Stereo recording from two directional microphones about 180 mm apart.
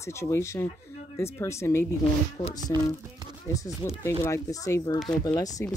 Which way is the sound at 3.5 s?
20° left (ahead or behind).